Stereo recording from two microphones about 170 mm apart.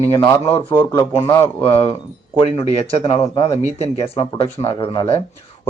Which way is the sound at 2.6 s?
35° left (ahead or behind).